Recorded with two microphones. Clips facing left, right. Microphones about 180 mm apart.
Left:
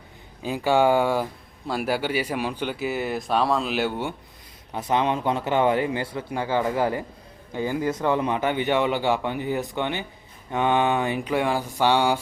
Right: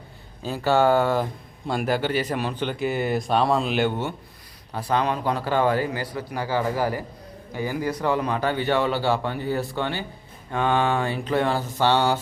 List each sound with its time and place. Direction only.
0.4 s speech: 15° left (ahead or behind)
4.7 s speech: 20° left (ahead or behind)